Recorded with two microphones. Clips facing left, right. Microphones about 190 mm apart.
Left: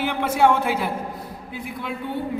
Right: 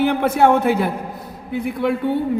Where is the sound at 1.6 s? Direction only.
65° right (ahead or behind).